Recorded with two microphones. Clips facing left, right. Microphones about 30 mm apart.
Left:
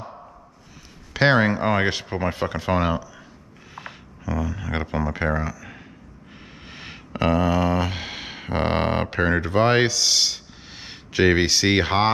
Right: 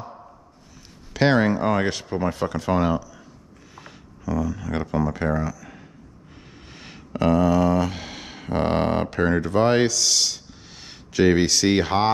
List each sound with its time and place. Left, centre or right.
1.1 s speech: centre
3.7 s a sound: centre
5.1 s speech: centre